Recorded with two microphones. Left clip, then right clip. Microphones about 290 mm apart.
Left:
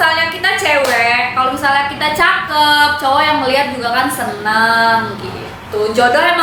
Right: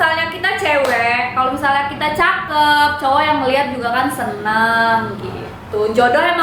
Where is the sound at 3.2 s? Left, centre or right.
Centre.